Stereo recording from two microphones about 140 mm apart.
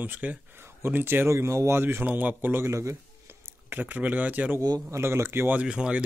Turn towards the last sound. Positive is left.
turn(degrees=-5)  # may be behind; listen again after turning